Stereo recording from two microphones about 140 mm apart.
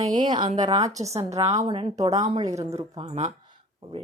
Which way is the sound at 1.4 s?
50° right (ahead or behind).